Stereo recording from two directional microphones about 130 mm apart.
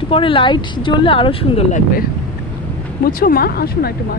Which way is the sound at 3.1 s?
90° left.